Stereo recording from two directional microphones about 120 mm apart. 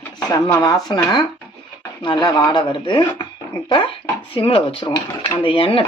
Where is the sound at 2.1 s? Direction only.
35° left (ahead or behind).